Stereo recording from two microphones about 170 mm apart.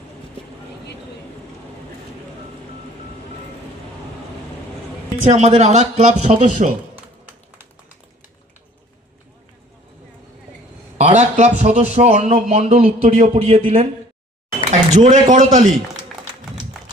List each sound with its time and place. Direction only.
5.2 s speech: 40° right (ahead or behind)
10.9 s a man's voice: 45° right (ahead or behind)